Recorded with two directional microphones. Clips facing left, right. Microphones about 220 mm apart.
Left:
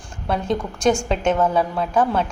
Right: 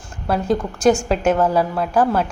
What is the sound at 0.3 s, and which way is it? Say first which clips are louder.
A woman's voice: right 3 dB; 5° right (ahead or behind).